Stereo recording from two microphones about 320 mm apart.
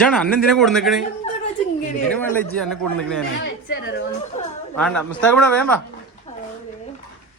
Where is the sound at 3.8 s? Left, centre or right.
Left.